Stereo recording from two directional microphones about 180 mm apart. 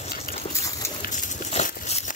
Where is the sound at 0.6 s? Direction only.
20° left (ahead or behind).